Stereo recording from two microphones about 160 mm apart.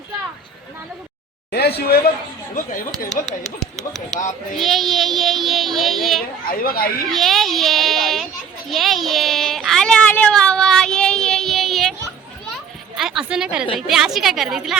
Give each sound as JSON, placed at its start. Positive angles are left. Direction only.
{"t": 1.5, "sound": "a sound", "side_deg": 90}
{"t": 4.1, "sound": "speech", "side_deg": 50}
{"t": 4.5, "sound": "speech", "side_deg": 0}
{"t": 6.5, "sound": "speech", "side_deg": 65}
{"t": 7.1, "sound": "speech", "side_deg": 0}
{"t": 8.7, "sound": "child singing", "side_deg": 0}
{"t": 13.0, "sound": "a sound", "side_deg": -5}
{"t": 13.7, "sound": "a woman's voice", "side_deg": -5}